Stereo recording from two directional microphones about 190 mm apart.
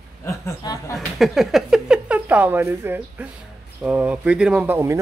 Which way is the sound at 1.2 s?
Centre (ahead or behind).